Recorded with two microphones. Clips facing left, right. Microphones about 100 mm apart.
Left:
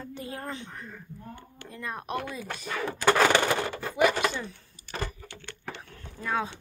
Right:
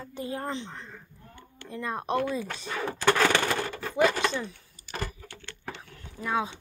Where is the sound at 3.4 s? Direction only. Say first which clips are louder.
Left 2 dB; 20° left (ahead or behind).